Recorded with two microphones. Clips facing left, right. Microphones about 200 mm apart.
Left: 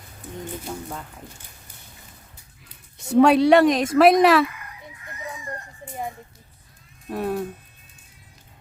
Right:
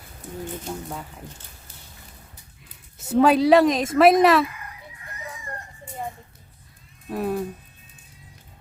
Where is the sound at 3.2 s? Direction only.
Centre (ahead or behind).